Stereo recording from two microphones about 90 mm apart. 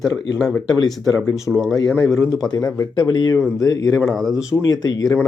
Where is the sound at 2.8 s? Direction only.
50° left (ahead or behind).